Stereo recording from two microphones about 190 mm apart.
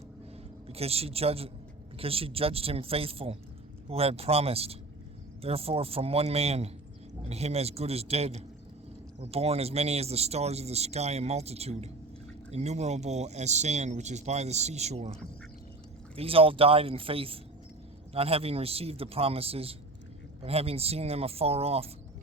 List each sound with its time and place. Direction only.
0.7 s speech: 30° right (ahead or behind)
16.1 s speech: 30° right (ahead or behind)